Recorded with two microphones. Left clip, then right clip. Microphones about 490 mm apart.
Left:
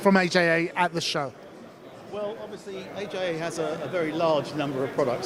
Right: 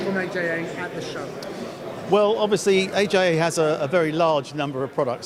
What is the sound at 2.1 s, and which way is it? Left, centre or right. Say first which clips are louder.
Speech: right 15 dB; right.